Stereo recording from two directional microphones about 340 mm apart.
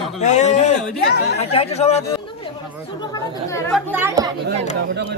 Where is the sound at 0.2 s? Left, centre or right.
Centre.